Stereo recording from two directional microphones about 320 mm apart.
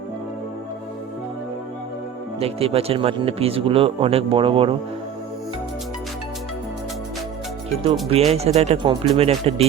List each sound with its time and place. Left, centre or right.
2.4 s speech: centre
8.1 s speech: centre